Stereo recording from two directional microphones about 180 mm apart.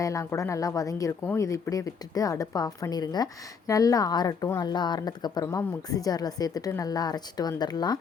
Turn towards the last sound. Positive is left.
turn(degrees=25)  # may be behind; listen again after turning